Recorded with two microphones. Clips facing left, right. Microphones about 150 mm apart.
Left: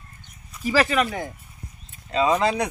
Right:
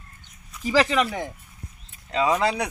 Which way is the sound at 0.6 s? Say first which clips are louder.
Even; 20° right (ahead or behind).